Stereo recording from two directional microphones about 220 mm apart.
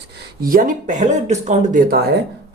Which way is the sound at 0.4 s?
40° right (ahead or behind).